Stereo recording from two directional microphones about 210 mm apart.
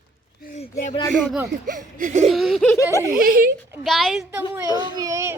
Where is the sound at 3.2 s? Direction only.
45° right (ahead or behind).